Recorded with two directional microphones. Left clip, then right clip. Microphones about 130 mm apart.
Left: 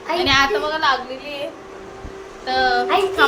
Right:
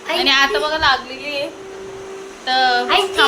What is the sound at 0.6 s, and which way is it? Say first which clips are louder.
Speech: right 3 dB; 20° right (ahead or behind).